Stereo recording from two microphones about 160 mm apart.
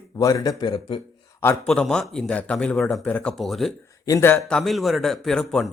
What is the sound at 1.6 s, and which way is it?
A man's voice, 5° left (ahead or behind).